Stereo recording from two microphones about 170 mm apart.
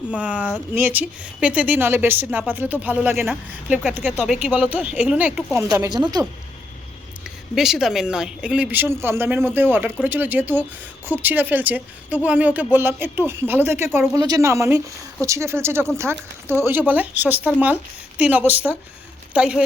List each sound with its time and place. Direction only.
0.1 s speech: 5° right (ahead or behind)
7.3 s speech: 5° right (ahead or behind)